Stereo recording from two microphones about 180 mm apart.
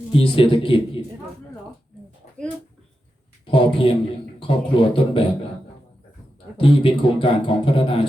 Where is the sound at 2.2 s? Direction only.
45° left (ahead or behind).